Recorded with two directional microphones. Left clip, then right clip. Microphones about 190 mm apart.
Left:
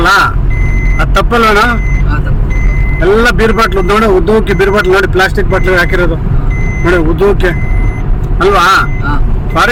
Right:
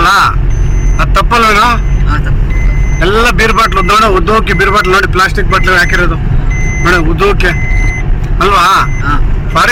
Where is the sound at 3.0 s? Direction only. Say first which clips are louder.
Even; 5° left (ahead or behind).